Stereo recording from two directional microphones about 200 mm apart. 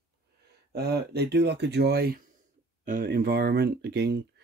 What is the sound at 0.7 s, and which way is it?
Speech, 55° right (ahead or behind).